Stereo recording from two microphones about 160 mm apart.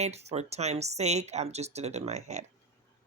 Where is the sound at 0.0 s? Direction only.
40° right (ahead or behind).